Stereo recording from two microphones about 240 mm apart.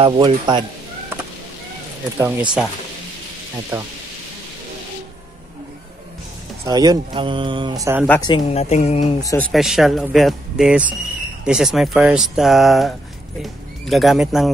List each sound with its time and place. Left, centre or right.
0.0 s speech: centre
2.1 s speech: centre
6.6 s speech: centre
8.3 s speech: left
9.2 s speech: centre
9.5 s speech: centre